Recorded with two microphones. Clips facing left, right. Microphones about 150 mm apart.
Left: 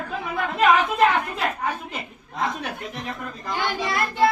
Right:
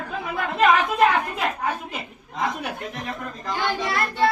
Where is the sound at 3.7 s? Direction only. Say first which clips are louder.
Left 1 dB; 10° left (ahead or behind).